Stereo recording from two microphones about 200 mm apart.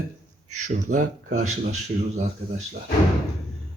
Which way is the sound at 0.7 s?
40° right (ahead or behind).